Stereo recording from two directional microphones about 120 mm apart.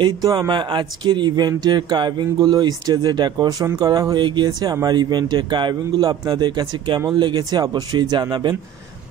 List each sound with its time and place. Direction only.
0.0 s a man's voice: 35° right (ahead or behind)